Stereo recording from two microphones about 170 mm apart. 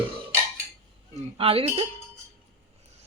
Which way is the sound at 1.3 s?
35° right (ahead or behind).